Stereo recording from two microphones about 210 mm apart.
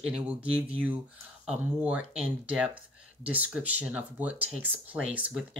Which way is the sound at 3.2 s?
5° right (ahead or behind).